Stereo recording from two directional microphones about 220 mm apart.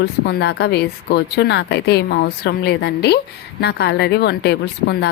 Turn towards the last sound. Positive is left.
turn(degrees=45)  # may be behind; listen again after turning